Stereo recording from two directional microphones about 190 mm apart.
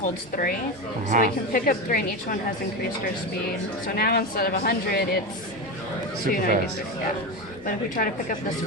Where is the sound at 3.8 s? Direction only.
55° left (ahead or behind).